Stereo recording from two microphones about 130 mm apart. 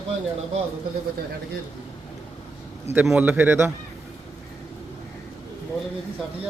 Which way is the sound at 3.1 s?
15° right (ahead or behind).